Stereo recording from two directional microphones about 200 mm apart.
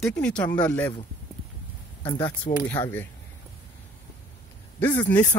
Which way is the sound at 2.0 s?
25° left (ahead or behind).